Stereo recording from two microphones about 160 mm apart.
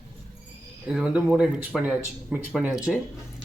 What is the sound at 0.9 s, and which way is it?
A man's voice, 5° right (ahead or behind).